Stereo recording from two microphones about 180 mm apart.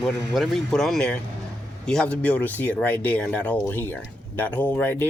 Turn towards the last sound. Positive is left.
turn(degrees=10)  # may be behind; listen again after turning